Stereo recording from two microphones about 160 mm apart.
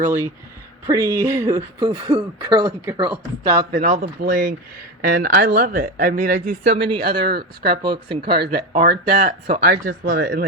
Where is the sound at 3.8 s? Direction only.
55° right (ahead or behind).